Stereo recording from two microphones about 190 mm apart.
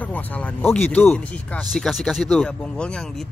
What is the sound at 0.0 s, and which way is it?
Speech, 10° left (ahead or behind).